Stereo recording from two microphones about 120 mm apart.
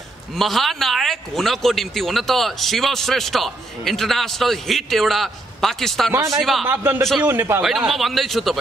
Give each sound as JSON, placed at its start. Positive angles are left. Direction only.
{"t": 0.4, "sound": "speech", "side_deg": 0}
{"t": 6.6, "sound": "a man's voice", "side_deg": -20}
{"t": 7.6, "sound": "speech", "side_deg": -5}